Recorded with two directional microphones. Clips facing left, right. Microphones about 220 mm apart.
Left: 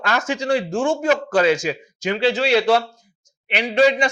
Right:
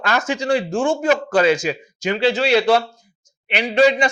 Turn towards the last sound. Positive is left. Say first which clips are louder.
# right 1 dB
turn(degrees=-15)  # may be behind; listen again after turning